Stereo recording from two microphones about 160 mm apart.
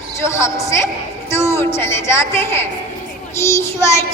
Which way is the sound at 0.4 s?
20° left (ahead or behind).